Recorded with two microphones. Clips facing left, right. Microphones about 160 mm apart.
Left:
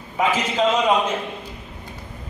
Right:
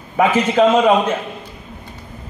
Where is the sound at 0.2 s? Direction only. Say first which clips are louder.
Right 7 dB; 60° right (ahead or behind).